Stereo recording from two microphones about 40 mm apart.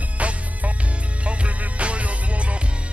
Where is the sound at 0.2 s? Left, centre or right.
Right.